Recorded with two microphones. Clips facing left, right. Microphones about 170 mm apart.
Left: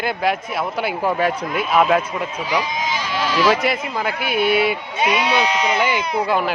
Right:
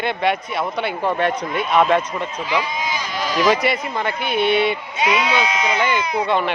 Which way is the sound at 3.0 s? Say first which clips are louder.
Left 2 dB; 45° right (ahead or behind).